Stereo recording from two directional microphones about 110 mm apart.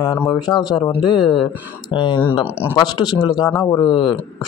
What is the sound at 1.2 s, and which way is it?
Speech, centre (ahead or behind).